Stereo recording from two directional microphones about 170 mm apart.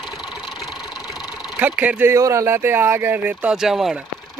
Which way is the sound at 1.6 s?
10° right (ahead or behind).